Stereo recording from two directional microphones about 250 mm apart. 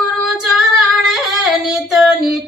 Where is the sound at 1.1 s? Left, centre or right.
Centre.